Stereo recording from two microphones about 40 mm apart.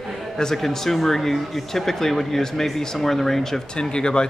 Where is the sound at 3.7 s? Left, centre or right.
Left.